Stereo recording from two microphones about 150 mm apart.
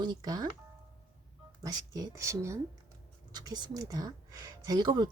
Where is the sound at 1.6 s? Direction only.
20° right (ahead or behind).